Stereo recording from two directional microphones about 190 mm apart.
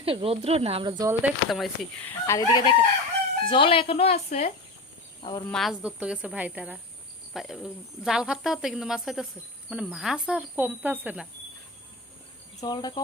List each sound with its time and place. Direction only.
0.0 s speech: 30° right (ahead or behind)
1.2 s speech: centre (ahead or behind)
2.0 s fowl: 15° left (ahead or behind)
3.5 s a woman's voice: 30° left (ahead or behind)
5.5 s a woman's voice: centre (ahead or behind)
12.6 s cricket: 20° left (ahead or behind)